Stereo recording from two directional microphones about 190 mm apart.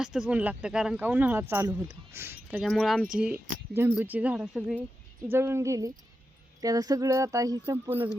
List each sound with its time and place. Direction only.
0.0 s speech: 5° right (ahead or behind)
2.6 s speech: centre (ahead or behind)